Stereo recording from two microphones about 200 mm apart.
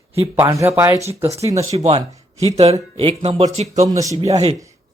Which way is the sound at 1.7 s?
30° right (ahead or behind).